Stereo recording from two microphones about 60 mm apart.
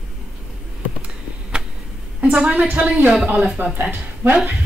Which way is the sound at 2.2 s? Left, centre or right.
Centre.